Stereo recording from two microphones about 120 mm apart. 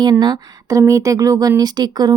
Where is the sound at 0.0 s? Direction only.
35° right (ahead or behind).